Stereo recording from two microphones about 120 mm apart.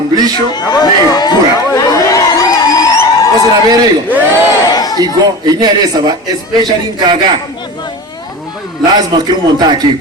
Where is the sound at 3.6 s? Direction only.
35° right (ahead or behind).